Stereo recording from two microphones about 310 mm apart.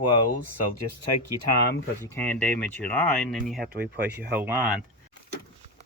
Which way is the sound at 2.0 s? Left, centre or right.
Centre.